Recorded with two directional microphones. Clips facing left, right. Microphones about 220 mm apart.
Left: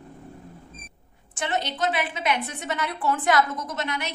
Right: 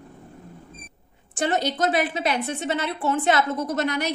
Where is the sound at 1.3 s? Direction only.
35° right (ahead or behind).